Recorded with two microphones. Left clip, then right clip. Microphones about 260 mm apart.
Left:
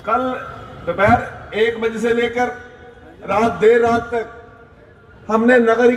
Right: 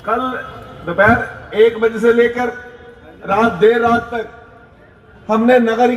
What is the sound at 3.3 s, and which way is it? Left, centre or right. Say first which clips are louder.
Speech: right 1 dB; right.